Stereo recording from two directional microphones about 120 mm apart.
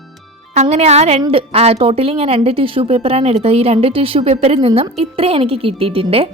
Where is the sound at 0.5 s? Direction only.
70° right (ahead or behind).